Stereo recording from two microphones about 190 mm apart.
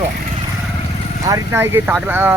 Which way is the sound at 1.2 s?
15° right (ahead or behind).